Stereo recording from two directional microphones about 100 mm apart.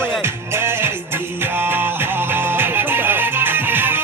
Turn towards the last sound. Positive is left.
turn(degrees=-20)  # may be behind; listen again after turning